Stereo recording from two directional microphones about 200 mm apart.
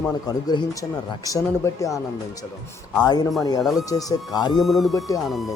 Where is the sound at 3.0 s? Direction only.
20° left (ahead or behind).